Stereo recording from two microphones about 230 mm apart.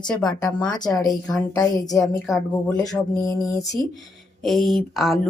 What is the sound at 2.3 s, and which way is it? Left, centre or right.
Speech, centre.